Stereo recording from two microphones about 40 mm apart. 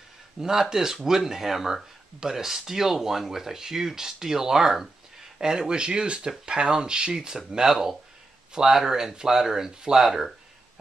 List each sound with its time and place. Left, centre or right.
0.4 s speech: centre
9.9 s speech: centre